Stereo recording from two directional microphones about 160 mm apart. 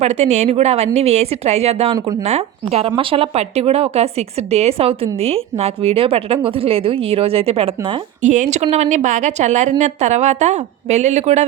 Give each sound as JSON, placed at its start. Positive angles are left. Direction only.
{"t": 0.0, "sound": "a woman's voice", "side_deg": -45}
{"t": 8.2, "sound": "a woman's voice", "side_deg": -50}